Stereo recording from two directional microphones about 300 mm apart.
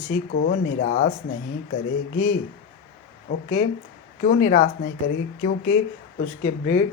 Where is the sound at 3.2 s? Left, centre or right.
Left.